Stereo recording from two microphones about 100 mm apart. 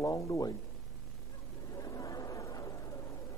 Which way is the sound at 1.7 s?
35° left (ahead or behind).